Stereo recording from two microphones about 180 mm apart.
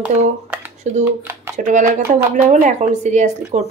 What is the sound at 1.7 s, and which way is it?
Speech, 45° right (ahead or behind).